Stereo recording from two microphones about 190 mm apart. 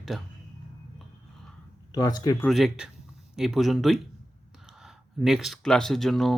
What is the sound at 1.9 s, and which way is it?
Speech, 20° left (ahead or behind).